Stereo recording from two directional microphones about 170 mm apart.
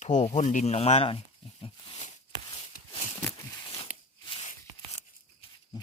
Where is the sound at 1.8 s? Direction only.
35° left (ahead or behind).